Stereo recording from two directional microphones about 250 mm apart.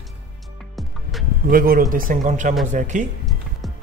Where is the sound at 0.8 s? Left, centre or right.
Centre.